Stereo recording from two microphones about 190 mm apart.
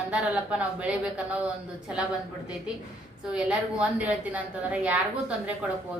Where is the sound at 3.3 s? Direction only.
5° right (ahead or behind).